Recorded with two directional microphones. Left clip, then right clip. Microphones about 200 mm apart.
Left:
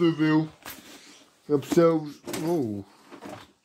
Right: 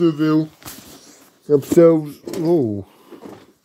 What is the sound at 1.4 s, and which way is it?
Speech, 20° right (ahead or behind).